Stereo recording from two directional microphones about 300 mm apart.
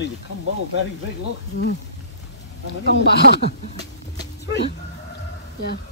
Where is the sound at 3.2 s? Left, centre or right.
Left.